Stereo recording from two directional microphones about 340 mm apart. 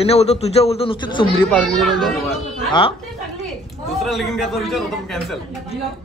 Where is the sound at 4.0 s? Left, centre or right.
Centre.